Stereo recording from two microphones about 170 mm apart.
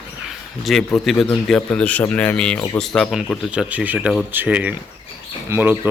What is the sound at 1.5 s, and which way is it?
Speech, 5° left (ahead or behind).